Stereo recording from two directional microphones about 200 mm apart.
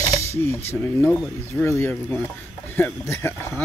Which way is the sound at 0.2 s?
15° left (ahead or behind).